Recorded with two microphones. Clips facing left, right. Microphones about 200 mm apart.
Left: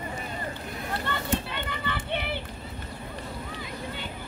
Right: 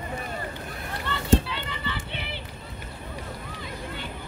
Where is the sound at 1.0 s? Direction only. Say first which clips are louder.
Right 8 dB; 55° left (ahead or behind).